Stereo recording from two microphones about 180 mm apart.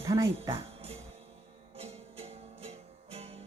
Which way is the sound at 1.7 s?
30° right (ahead or behind).